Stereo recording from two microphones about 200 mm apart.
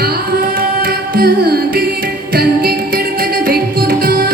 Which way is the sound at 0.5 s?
50° right (ahead or behind).